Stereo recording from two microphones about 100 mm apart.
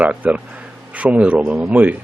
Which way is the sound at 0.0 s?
15° right (ahead or behind).